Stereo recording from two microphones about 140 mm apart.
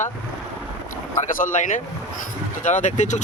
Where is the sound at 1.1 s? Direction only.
65° left (ahead or behind).